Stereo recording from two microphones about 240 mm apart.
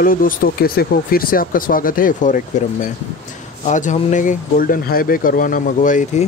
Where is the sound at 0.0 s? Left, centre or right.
Left.